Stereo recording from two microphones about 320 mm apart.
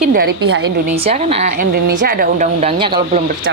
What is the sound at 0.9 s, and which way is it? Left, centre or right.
Speech, centre.